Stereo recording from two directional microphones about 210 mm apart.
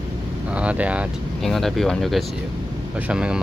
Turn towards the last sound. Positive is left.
turn(degrees=-5)  # may be behind; listen again after turning